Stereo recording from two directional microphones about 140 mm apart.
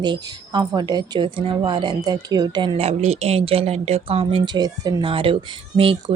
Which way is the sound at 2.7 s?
50° right (ahead or behind).